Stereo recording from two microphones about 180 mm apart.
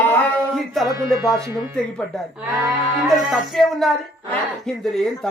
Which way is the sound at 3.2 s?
Centre (ahead or behind).